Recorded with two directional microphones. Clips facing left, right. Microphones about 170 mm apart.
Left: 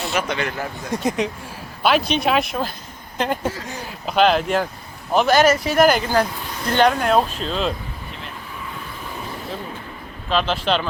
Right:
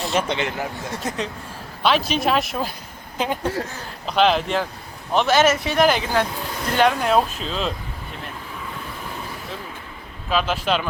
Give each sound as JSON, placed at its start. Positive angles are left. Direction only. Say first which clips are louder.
{"t": 0.1, "sound": "a man's voice", "louder": "right 1 dB", "side_deg": -25}
{"t": 1.0, "sound": "speech", "louder": "left 6 dB", "side_deg": 10}
{"t": 1.8, "sound": "speech", "louder": "left 1 dB", "side_deg": 0}
{"t": 10.2, "sound": "speech", "louder": "left 1 dB", "side_deg": -5}